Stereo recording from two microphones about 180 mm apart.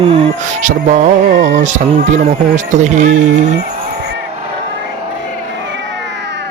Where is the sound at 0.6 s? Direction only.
40° right (ahead or behind).